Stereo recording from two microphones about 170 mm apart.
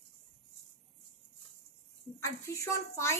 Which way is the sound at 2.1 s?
15° left (ahead or behind).